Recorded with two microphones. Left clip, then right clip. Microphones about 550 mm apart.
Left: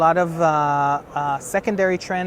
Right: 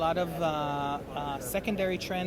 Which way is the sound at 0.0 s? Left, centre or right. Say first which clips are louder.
Left 12 dB; left.